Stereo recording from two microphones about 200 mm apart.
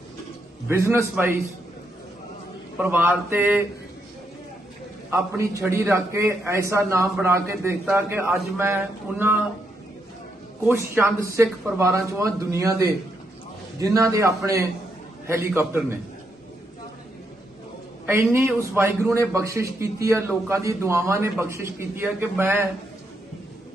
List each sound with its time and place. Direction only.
0.9 s a man's voice: 10° right (ahead or behind)
2.7 s a man's voice: 10° right (ahead or behind)
5.1 s a man's voice: 15° right (ahead or behind)
10.7 s a man's voice: 10° right (ahead or behind)
18.0 s a man's voice: 10° right (ahead or behind)